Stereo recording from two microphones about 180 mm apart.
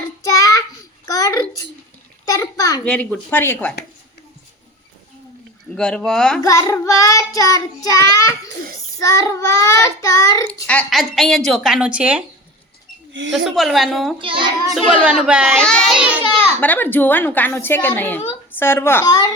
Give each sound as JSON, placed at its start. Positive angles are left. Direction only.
{"t": 0.3, "sound": "child singing", "side_deg": 20}
{"t": 1.0, "sound": "babbling", "side_deg": 20}
{"t": 2.2, "sound": "a sound", "side_deg": 20}
{"t": 2.8, "sound": "a child's voice", "side_deg": 5}
{"t": 5.7, "sound": "a woman's voice", "side_deg": 5}
{"t": 6.4, "sound": "child singing", "side_deg": 20}
{"t": 10.4, "sound": "a woman's voice", "side_deg": 5}
{"t": 13.3, "sound": "a woman's voice", "side_deg": 0}
{"t": 14.2, "sound": "child singing", "side_deg": -30}
{"t": 14.7, "sound": "a woman's voice", "side_deg": 0}
{"t": 15.5, "sound": "a child's voice", "side_deg": 5}
{"t": 16.6, "sound": "a child's voice", "side_deg": 10}